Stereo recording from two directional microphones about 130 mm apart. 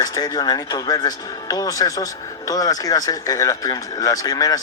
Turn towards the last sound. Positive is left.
turn(degrees=30)  # may be behind; listen again after turning